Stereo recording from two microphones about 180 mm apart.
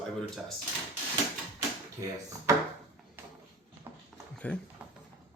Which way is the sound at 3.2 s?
15° right (ahead or behind).